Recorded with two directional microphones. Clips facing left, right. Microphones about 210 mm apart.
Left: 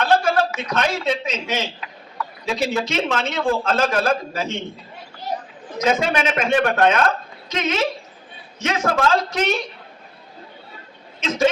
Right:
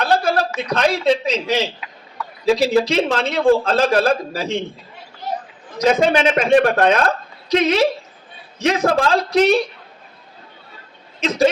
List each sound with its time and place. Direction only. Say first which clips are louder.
0.0 s a sound: even; 35° right (ahead or behind)
0.6 s a man's voice: right 4 dB; 35° right (ahead or behind)
5.8 s a man's voice: right 5 dB; 35° right (ahead or behind)
11.2 s speech: right 4 dB; 35° right (ahead or behind)